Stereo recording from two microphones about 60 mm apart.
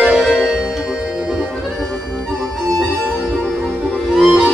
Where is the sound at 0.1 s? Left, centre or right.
Centre.